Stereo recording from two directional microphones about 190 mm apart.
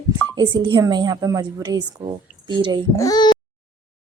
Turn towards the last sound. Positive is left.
turn(degrees=20)  # may be behind; listen again after turning